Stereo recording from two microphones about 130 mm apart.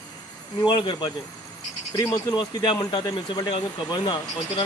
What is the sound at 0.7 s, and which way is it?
Speech, 35° left (ahead or behind).